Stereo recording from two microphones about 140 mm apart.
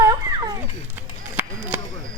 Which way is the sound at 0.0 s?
25° right (ahead or behind).